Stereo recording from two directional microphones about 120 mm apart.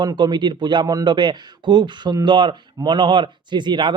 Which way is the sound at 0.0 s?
35° right (ahead or behind).